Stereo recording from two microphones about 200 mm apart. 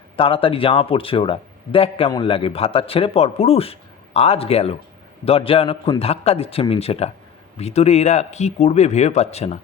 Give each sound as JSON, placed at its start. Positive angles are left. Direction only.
{"t": 0.2, "sound": "speech", "side_deg": 25}